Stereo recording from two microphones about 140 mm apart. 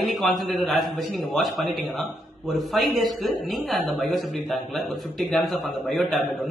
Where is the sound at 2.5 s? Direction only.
Centre (ahead or behind).